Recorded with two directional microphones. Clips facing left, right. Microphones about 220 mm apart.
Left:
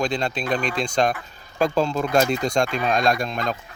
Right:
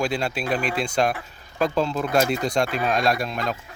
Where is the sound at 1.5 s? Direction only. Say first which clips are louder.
Left 2 dB; 45° left (ahead or behind).